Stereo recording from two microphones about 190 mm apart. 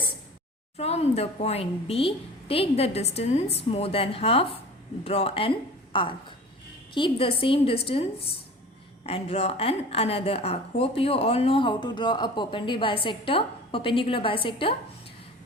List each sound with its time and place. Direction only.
0.8 s a woman's voice: 35° left (ahead or behind)